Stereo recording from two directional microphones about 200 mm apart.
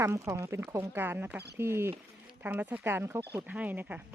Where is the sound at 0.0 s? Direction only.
15° right (ahead or behind).